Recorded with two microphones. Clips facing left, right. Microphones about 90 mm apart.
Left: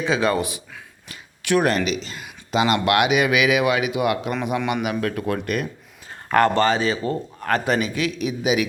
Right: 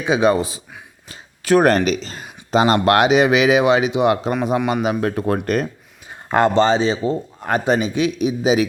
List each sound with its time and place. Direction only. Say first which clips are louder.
0.0 s a man's voice: right 4 dB; 20° right (ahead or behind)
6.2 s a man's voice: right 2 dB; 20° right (ahead or behind)